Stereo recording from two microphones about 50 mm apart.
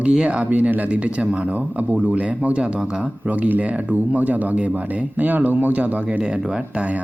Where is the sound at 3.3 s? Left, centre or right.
Right.